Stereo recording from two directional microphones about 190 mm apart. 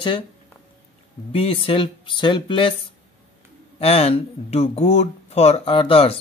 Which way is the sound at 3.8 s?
30° left (ahead or behind).